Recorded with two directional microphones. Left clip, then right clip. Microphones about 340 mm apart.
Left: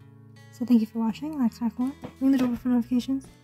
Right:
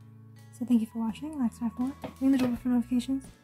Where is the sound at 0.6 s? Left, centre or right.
Centre.